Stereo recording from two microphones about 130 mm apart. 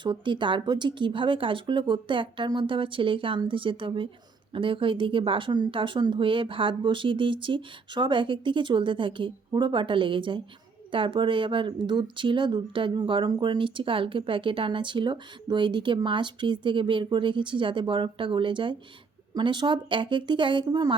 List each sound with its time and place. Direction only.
0.0 s speech: 40° right (ahead or behind)